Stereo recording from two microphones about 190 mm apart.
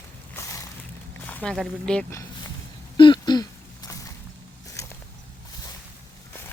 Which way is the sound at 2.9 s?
25° left (ahead or behind).